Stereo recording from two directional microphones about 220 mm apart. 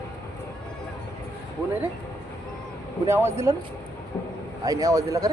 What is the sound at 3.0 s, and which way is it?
Speech, 10° right (ahead or behind).